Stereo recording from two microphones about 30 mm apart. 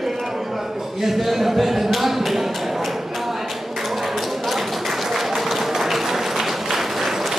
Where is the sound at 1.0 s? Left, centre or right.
Centre.